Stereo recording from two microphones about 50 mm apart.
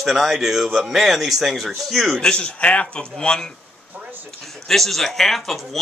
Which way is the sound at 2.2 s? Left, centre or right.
Left.